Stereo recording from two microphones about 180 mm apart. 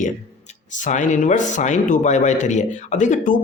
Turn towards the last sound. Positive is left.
turn(degrees=45)  # may be behind; listen again after turning